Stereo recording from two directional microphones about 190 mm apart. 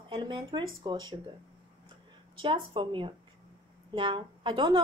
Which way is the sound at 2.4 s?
25° right (ahead or behind).